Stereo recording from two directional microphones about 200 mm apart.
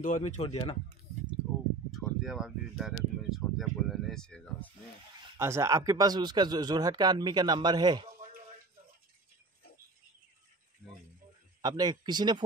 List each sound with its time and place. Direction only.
0.0 s speech: 40° left (ahead or behind)
1.9 s speech: centre (ahead or behind)
5.4 s a man's voice: 15° right (ahead or behind)
10.8 s speech: 10° left (ahead or behind)
11.6 s a man's voice: 20° right (ahead or behind)